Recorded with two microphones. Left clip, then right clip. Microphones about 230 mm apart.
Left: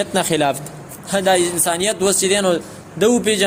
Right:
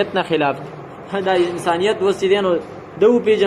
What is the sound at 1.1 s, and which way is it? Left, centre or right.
Speech, left.